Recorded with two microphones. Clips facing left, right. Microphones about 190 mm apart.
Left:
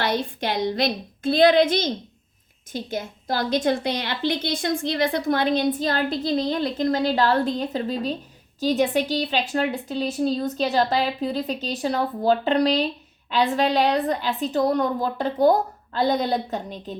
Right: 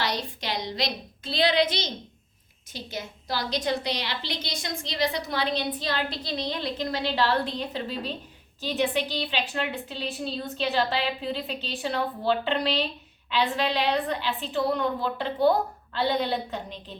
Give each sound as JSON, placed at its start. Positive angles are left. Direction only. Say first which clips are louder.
{"t": 0.0, "sound": "a woman's voice", "louder": "left 6 dB", "side_deg": 55}